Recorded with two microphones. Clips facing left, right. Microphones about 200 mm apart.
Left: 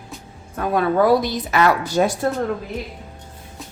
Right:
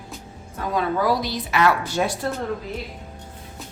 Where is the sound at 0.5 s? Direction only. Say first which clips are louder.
Left 5 dB; 60° left (ahead or behind); by 2.3 s 40° left (ahead or behind).